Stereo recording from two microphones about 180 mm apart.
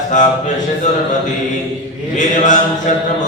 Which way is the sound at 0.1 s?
45° left (ahead or behind).